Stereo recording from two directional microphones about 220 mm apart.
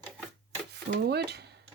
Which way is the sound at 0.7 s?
50° right (ahead or behind).